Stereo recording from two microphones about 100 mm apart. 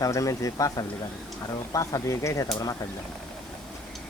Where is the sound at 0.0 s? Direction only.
35° left (ahead or behind).